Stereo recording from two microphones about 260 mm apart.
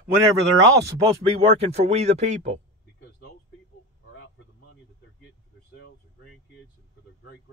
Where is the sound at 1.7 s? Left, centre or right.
Right.